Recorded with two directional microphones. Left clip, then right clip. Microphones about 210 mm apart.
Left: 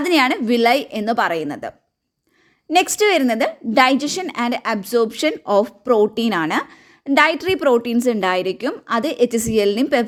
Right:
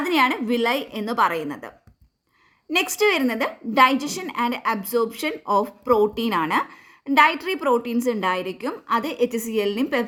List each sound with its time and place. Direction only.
0.0 s a woman's voice: 35° left (ahead or behind)